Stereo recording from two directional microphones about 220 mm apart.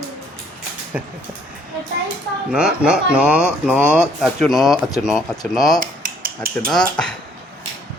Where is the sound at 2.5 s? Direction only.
5° right (ahead or behind).